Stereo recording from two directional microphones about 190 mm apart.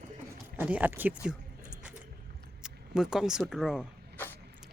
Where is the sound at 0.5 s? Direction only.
10° right (ahead or behind).